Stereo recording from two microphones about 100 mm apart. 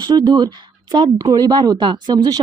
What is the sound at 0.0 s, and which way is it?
A woman's voice, 40° right (ahead or behind).